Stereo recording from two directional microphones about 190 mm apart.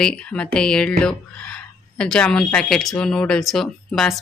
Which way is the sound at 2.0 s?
5° left (ahead or behind).